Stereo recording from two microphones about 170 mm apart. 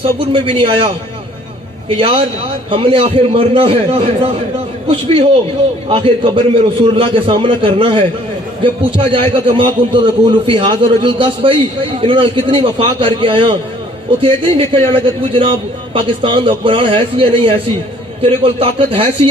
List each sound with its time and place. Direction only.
0.0 s a man's voice: 30° right (ahead or behind)
2.0 s a man's voice: 35° right (ahead or behind)